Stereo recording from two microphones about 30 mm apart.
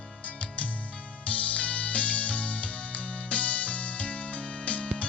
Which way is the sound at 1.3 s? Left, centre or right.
Left.